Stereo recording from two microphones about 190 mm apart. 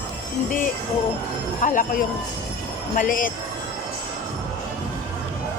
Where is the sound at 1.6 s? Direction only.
45° left (ahead or behind).